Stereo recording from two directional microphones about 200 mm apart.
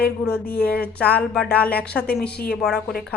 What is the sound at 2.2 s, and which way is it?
Speech, 55° left (ahead or behind).